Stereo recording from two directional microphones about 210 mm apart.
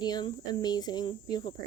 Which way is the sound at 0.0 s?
20° left (ahead or behind).